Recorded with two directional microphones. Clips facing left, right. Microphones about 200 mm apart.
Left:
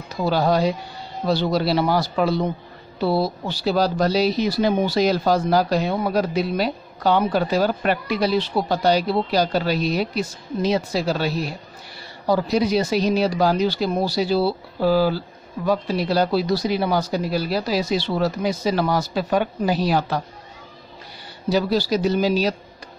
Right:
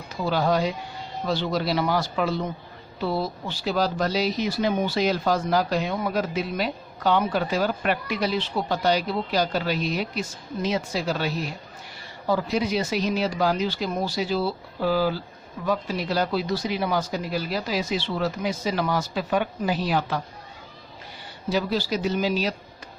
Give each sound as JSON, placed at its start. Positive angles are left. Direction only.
{"t": 0.1, "sound": "speech", "side_deg": 35}
{"t": 21.5, "sound": "speech", "side_deg": 35}